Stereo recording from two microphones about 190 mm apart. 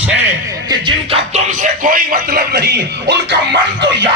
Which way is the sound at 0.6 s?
25° right (ahead or behind).